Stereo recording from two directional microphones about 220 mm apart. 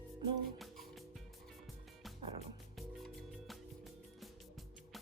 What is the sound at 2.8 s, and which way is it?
Music, centre (ahead or behind).